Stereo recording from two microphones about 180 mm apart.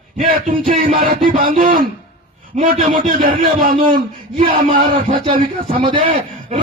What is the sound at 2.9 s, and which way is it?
A man's voice, 50° right (ahead or behind).